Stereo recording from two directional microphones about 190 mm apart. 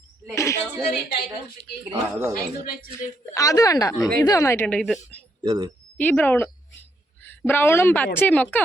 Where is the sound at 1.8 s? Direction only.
15° right (ahead or behind).